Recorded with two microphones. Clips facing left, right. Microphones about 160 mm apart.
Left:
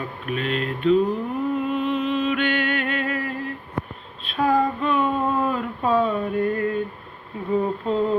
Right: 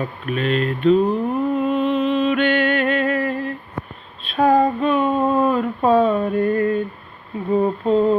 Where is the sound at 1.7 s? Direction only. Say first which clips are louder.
Right 4 dB; 25° right (ahead or behind).